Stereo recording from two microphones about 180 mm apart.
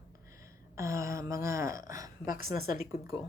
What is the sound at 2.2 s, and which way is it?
Speech, 50° left (ahead or behind).